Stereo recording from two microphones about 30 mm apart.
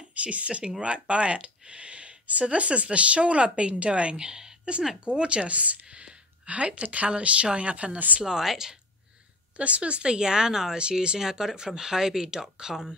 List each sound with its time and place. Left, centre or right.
0.1 s speech: right
4.3 s a sound: centre
5.0 s speech: right
5.5 s speech: right
5.9 s a sound: right
7.1 s speech: right
8.4 s speech: centre
9.6 s speech: right
10.0 s speech: right
11.1 s speech: centre